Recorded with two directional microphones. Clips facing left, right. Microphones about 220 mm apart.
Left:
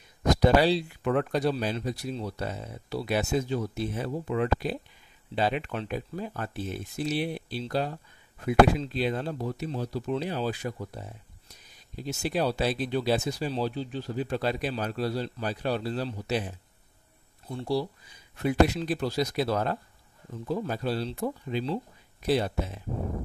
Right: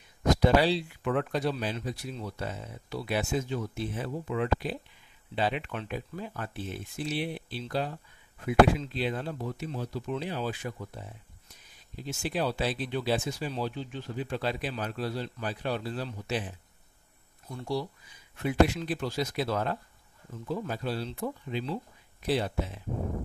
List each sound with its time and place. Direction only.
0.4 s speech: 40° left (ahead or behind)